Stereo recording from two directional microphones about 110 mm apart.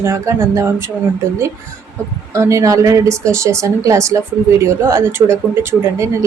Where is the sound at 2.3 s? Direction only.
30° right (ahead or behind).